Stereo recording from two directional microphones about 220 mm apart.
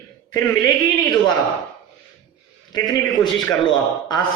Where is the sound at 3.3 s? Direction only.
Centre (ahead or behind).